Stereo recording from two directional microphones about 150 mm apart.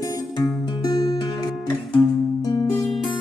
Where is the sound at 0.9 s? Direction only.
25° left (ahead or behind).